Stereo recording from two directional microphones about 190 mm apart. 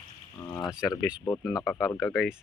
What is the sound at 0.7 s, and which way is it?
Speech, 5° right (ahead or behind).